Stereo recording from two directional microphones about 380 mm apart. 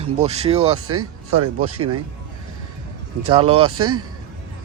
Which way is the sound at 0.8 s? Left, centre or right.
Right.